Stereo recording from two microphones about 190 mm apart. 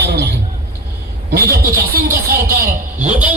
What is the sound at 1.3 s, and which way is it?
Speech, 55° right (ahead or behind).